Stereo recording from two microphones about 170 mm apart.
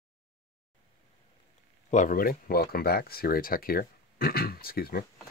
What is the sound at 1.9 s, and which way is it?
Speech, 50° left (ahead or behind).